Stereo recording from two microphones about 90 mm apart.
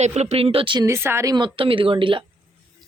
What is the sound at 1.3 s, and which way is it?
Speech, 70° right (ahead or behind).